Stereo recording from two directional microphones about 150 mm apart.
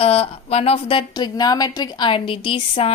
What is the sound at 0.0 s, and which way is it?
A woman's voice, 40° left (ahead or behind).